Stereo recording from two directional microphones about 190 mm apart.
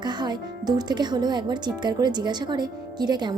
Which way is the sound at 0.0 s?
20° right (ahead or behind).